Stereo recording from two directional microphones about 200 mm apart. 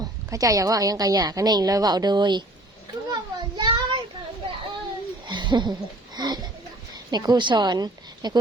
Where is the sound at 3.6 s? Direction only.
20° right (ahead or behind).